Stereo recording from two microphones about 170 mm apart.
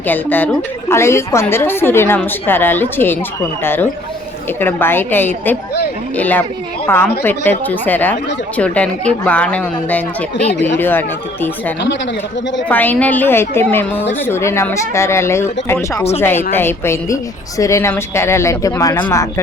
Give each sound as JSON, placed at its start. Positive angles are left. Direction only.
{"t": 0.1, "sound": "a woman's voice", "side_deg": 10}